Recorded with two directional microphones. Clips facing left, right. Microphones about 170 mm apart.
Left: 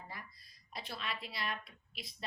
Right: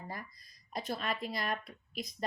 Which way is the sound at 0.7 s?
45° right (ahead or behind).